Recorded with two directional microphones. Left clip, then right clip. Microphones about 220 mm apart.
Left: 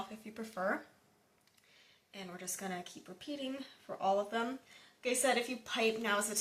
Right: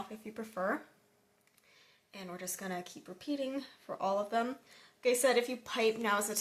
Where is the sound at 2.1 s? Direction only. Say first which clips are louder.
Right 2 dB; 45° right (ahead or behind).